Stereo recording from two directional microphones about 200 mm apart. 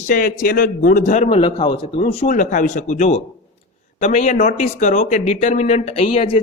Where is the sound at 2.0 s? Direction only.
40° left (ahead or behind).